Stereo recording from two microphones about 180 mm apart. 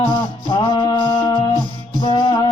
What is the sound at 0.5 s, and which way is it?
Mantra, 25° left (ahead or behind).